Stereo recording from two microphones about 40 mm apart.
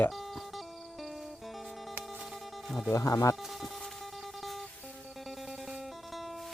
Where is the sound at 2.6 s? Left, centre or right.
Centre.